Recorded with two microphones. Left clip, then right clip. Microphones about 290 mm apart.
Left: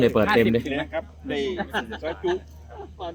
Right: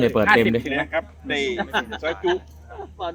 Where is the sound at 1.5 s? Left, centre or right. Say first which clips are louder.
Right 4 dB; right.